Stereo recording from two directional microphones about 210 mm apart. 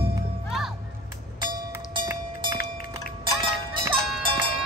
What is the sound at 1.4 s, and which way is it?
Music, 20° right (ahead or behind).